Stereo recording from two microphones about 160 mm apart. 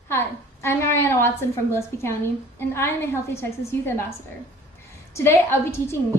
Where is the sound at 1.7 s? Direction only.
15° left (ahead or behind).